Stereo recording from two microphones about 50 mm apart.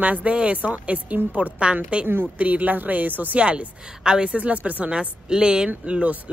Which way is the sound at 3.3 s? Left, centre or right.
Right.